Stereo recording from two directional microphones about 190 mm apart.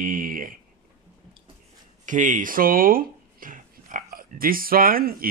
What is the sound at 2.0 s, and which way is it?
Speech, 40° right (ahead or behind).